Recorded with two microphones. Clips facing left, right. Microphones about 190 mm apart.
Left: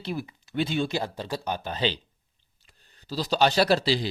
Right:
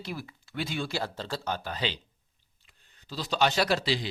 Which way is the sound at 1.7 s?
30° left (ahead or behind).